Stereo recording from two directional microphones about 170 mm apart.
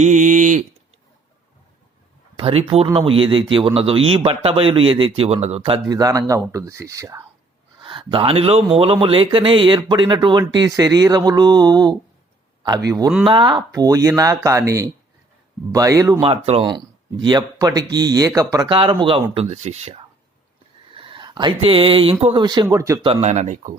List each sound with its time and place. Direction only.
0.0 s speech: 45° right (ahead or behind)
2.3 s a man's voice: 35° right (ahead or behind)
5.9 s speech: 20° right (ahead or behind)
7.9 s speech: 30° right (ahead or behind)
13.2 s speech: 30° right (ahead or behind)
16.2 s a man's voice: 35° right (ahead or behind)
20.9 s speech: 30° right (ahead or behind)
23.0 s speech: 40° right (ahead or behind)